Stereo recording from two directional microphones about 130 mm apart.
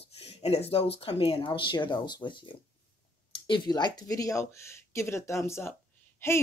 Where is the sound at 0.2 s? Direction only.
50° left (ahead or behind).